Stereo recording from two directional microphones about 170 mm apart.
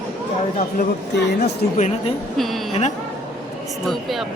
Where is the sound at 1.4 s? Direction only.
45° left (ahead or behind).